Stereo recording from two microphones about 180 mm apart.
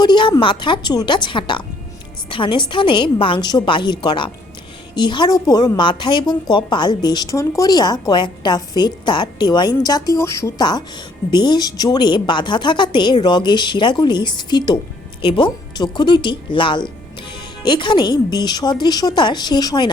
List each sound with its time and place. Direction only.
0.0 s a woman's voice: 25° left (ahead or behind)